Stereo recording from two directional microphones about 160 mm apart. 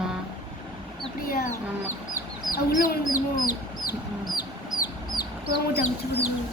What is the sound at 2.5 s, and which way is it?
Speech, 60° left (ahead or behind).